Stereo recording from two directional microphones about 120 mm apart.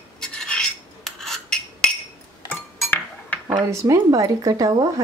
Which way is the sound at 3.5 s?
25° right (ahead or behind).